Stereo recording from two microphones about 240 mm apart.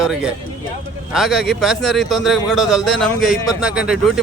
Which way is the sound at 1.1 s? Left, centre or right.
Centre.